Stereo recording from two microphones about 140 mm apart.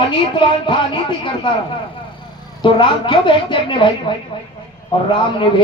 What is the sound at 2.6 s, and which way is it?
A man's voice, 35° left (ahead or behind).